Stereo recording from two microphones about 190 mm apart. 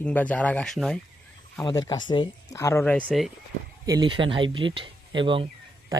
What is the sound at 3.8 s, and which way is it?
Speech, 20° right (ahead or behind).